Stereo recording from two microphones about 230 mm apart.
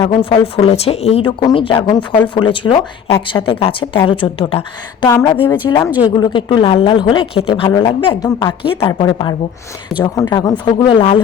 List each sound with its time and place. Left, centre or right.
0.0 s a woman's voice: left